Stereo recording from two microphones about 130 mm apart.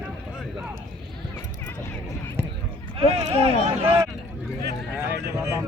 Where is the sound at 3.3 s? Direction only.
50° right (ahead or behind).